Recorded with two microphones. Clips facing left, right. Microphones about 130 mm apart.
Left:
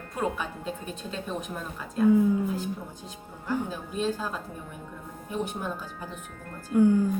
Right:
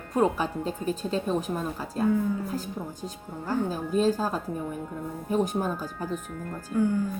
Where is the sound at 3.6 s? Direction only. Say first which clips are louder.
Right 6 dB; 40° right (ahead or behind).